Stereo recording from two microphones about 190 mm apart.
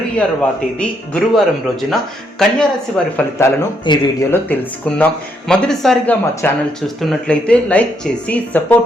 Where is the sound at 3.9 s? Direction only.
25° left (ahead or behind).